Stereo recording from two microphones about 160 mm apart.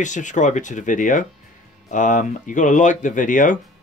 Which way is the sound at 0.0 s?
50° left (ahead or behind).